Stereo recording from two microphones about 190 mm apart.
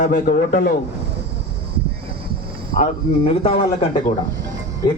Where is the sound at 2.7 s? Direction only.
30° left (ahead or behind).